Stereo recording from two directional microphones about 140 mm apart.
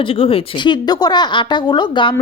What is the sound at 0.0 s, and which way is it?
A woman's voice, 40° left (ahead or behind).